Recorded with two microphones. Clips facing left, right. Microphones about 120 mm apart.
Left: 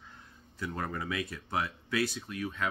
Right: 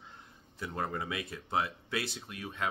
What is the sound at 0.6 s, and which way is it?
Speech, 25° right (ahead or behind).